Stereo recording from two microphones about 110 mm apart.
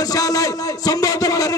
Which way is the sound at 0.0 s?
35° left (ahead or behind).